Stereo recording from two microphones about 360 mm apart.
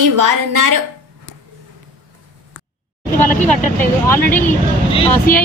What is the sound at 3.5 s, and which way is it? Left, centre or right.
Speech, centre.